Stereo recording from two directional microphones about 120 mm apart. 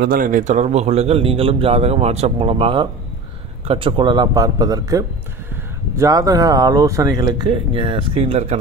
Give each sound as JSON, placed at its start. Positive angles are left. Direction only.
{"t": 0.3, "sound": "speech", "side_deg": -80}
{"t": 7.7, "sound": "speech", "side_deg": -50}